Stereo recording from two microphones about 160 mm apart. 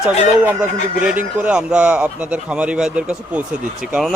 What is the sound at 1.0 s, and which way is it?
Speech, 10° right (ahead or behind).